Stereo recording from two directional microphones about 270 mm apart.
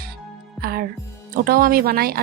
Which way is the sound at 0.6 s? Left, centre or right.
Right.